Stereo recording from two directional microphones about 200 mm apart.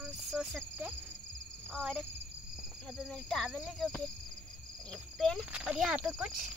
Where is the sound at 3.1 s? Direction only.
5° left (ahead or behind).